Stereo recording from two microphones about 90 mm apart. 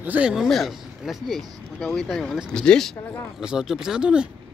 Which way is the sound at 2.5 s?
10° left (ahead or behind).